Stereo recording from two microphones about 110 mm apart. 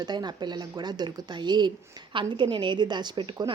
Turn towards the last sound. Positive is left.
turn(degrees=-45)  # may be behind; listen again after turning